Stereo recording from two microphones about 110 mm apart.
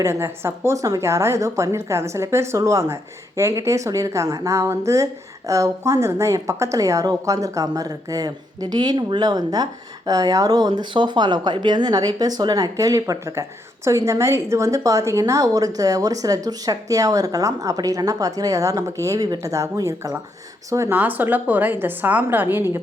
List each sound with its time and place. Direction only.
0.0 s a woman's voice: 25° right (ahead or behind)
20.9 s a woman's voice: 15° right (ahead or behind)